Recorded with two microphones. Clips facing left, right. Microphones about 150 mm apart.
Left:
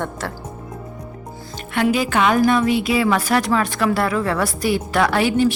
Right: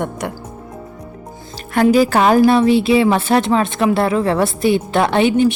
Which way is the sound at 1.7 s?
40° right (ahead or behind).